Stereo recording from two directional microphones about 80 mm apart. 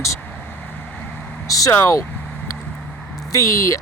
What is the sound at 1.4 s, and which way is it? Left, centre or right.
Speech, left.